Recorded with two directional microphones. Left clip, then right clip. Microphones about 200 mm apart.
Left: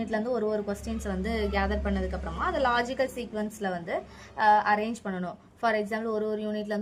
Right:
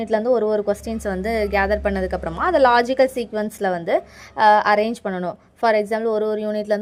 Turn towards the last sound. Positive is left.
turn(degrees=-35)  # may be behind; listen again after turning